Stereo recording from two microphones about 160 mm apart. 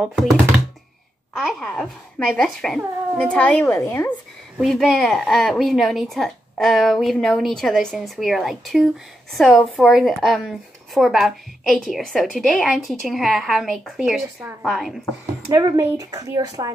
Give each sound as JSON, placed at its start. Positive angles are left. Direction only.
{"t": 0.0, "sound": "a woman's voice", "side_deg": -5}
{"t": 1.3, "sound": "a woman's voice", "side_deg": 0}
{"t": 4.6, "sound": "a woman's voice", "side_deg": 0}
{"t": 15.5, "sound": "speech", "side_deg": -20}